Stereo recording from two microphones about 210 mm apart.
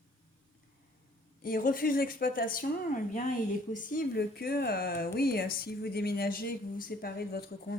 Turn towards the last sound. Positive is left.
turn(degrees=50)  # may be behind; listen again after turning